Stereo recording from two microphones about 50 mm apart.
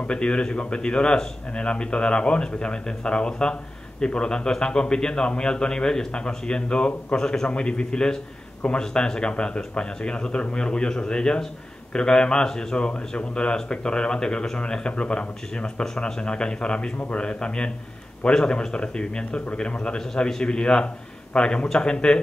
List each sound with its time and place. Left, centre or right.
0.0 s a man's voice: centre